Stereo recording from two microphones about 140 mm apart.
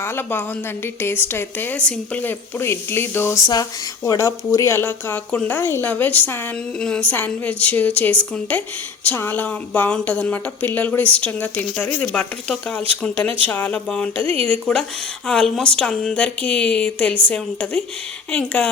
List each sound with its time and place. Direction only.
0.0 s a woman's voice: 15° left (ahead or behind)